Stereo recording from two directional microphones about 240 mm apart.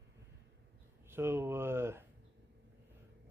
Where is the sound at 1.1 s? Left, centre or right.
Centre.